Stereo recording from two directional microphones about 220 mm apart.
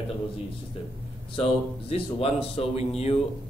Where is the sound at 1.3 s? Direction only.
25° left (ahead or behind).